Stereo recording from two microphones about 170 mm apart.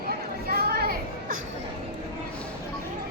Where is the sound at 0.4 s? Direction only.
65° right (ahead or behind).